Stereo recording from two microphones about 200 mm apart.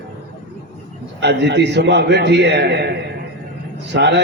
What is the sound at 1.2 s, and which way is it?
A man's voice, 60° right (ahead or behind).